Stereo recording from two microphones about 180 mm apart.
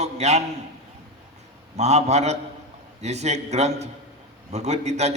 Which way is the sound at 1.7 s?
40° right (ahead or behind).